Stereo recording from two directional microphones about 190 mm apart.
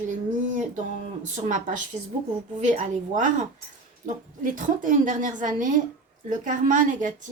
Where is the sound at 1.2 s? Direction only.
40° right (ahead or behind).